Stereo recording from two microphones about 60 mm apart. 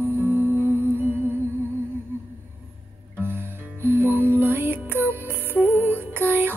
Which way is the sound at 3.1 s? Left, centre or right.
Right.